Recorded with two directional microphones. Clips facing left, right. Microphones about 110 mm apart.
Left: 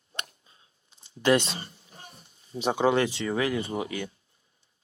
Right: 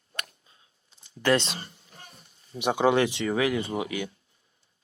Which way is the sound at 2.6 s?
20° right (ahead or behind).